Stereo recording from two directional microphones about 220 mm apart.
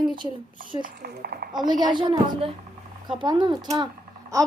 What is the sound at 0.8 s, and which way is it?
Speech, 45° right (ahead or behind).